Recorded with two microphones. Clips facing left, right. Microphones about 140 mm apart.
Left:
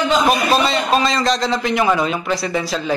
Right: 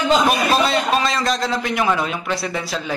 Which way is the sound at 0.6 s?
Centre (ahead or behind).